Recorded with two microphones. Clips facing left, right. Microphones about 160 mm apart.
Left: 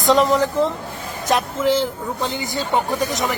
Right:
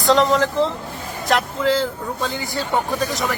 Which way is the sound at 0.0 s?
20° left (ahead or behind).